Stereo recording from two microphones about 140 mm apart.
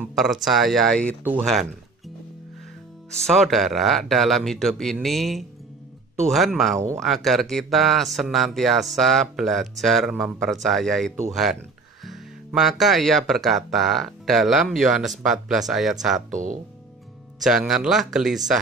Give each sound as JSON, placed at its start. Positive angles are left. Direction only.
{"t": 0.1, "sound": "speech", "side_deg": 0}
{"t": 3.1, "sound": "speech", "side_deg": 5}
{"t": 16.3, "sound": "speech", "side_deg": -65}
{"t": 17.4, "sound": "speech", "side_deg": 0}